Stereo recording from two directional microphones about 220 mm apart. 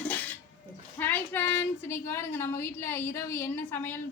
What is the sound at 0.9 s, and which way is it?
A woman's voice, 10° left (ahead or behind).